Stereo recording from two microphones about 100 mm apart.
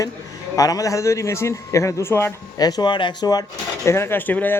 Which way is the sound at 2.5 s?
40° left (ahead or behind).